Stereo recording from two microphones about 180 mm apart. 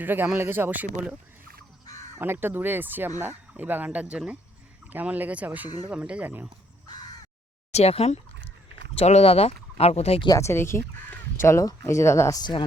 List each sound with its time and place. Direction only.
0.0 s speech: 10° right (ahead or behind)
2.1 s speech: 10° right (ahead or behind)
7.7 s speech: 35° left (ahead or behind)
10.2 s speech: 15° left (ahead or behind)